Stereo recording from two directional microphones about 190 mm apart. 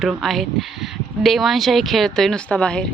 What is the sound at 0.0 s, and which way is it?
Speech, centre (ahead or behind).